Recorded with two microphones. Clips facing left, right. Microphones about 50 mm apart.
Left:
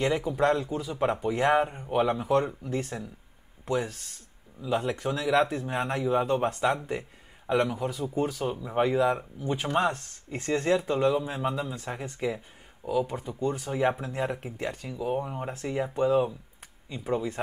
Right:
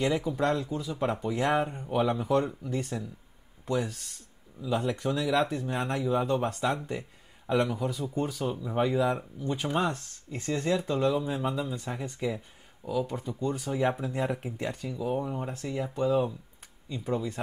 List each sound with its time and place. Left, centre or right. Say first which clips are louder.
0.0 s speech: left 2 dB; centre
9.8 s speech: left 3 dB; left
10.8 s speech: left 2 dB; centre
12.2 s speech: left 2 dB; centre
14.6 s speech: even; left